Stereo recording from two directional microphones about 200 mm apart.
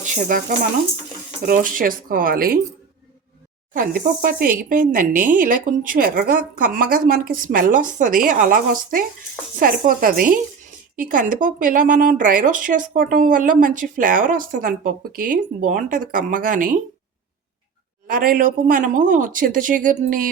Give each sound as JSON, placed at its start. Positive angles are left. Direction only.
{"t": 0.0, "sound": "speech", "side_deg": -40}
{"t": 3.8, "sound": "speech", "side_deg": -45}
{"t": 18.1, "sound": "speech", "side_deg": -45}